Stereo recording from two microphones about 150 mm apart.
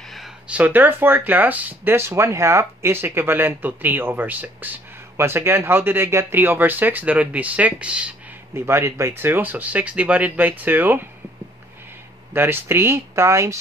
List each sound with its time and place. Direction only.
0.1 s speech: 5° right (ahead or behind)
8.5 s speech: 20° right (ahead or behind)
12.4 s speech: 15° right (ahead or behind)